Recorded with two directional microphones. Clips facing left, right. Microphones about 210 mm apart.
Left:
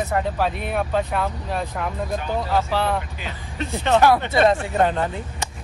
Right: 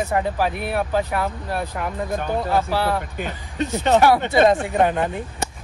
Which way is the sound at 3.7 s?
20° right (ahead or behind).